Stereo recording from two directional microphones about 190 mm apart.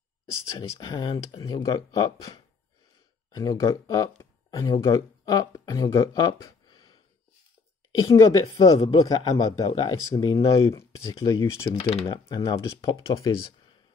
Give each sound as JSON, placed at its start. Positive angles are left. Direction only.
{"t": 0.3, "sound": "a woman's voice", "side_deg": 15}
{"t": 8.0, "sound": "a woman's voice", "side_deg": 15}
{"t": 11.8, "sound": "speech", "side_deg": 30}
{"t": 13.1, "sound": "a woman's voice", "side_deg": 15}